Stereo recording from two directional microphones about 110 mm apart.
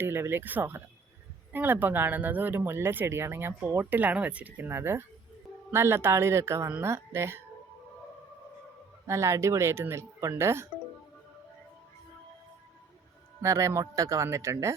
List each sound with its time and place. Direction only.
0.0 s speech: 20° right (ahead or behind)
9.0 s speech: 25° right (ahead or behind)
13.4 s speech: 25° right (ahead or behind)